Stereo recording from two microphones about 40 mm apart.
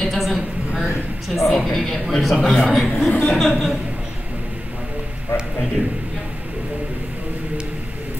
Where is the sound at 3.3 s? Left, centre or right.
Centre.